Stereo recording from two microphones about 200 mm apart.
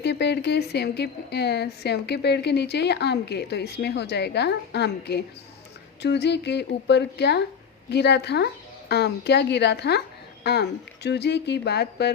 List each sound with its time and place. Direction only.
0.0 s a woman's voice: 60° left (ahead or behind)